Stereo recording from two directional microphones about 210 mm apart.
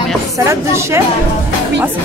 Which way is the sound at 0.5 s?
15° right (ahead or behind).